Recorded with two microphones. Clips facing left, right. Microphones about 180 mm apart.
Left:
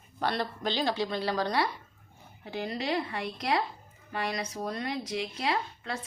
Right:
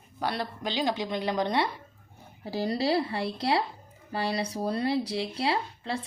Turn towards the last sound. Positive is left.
turn(degrees=-30)  # may be behind; listen again after turning